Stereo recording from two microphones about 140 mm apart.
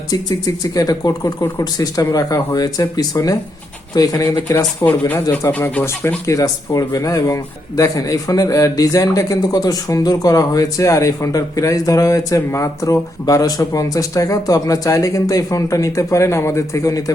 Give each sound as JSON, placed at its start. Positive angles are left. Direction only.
{"t": 0.1, "sound": "a man's voice", "side_deg": 30}